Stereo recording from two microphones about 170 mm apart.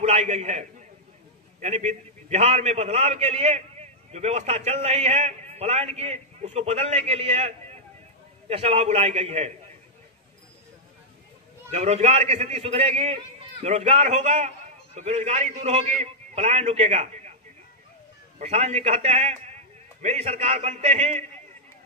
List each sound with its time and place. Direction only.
0.0 s a man's voice: 40° right (ahead or behind)
11.7 s a man's voice: 40° right (ahead or behind)
18.4 s a man's voice: 40° right (ahead or behind)